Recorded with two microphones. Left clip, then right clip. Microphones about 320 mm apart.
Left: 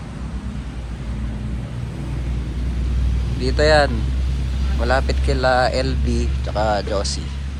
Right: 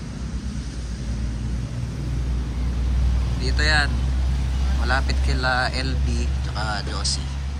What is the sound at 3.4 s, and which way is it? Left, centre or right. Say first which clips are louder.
Speech: left 7 dB; centre.